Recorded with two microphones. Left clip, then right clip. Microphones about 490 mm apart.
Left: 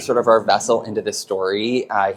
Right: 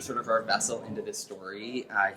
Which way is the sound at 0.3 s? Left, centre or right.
Left.